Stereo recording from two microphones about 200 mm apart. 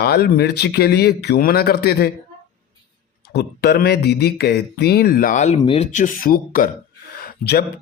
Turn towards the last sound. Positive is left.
turn(degrees=50)  # may be behind; listen again after turning